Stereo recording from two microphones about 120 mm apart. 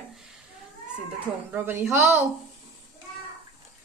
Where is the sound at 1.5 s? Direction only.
20° right (ahead or behind).